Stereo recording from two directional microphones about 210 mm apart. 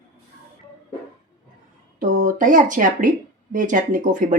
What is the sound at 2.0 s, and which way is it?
Speech, 40° right (ahead or behind).